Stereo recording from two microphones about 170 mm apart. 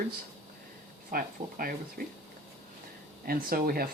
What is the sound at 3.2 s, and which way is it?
Speech, 60° right (ahead or behind).